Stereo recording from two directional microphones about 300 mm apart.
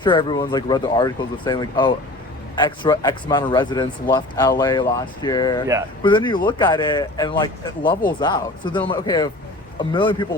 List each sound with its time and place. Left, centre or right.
0.0 s speech: centre